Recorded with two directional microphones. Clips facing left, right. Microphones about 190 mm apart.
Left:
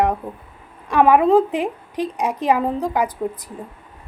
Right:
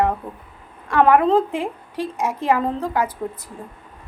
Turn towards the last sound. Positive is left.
turn(degrees=15)  # may be behind; listen again after turning